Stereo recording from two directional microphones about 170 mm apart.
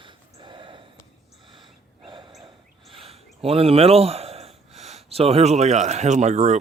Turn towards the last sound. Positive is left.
turn(degrees=-40)  # may be behind; listen again after turning